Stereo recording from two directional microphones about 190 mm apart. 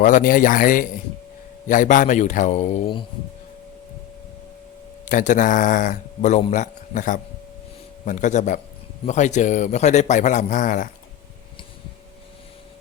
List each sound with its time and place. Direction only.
0.0 s a man's voice: 45° left (ahead or behind)
5.0 s a man's voice: 40° left (ahead or behind)